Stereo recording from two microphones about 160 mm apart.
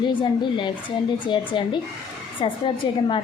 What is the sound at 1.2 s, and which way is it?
A woman's voice, 30° left (ahead or behind).